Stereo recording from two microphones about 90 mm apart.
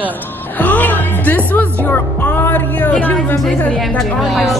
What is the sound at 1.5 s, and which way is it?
Speech, 20° left (ahead or behind).